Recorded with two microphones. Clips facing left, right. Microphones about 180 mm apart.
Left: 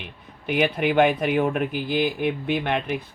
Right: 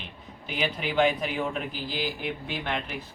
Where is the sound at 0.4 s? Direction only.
60° left (ahead or behind).